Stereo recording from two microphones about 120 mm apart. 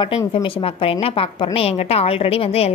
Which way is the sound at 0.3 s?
50° left (ahead or behind).